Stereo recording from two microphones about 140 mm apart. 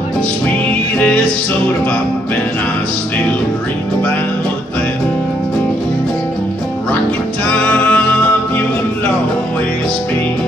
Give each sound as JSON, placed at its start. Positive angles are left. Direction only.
{"t": 0.9, "sound": "music", "side_deg": 10}
{"t": 7.5, "sound": "music", "side_deg": 10}